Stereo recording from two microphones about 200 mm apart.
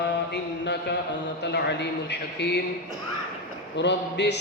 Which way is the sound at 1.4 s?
60° left (ahead or behind).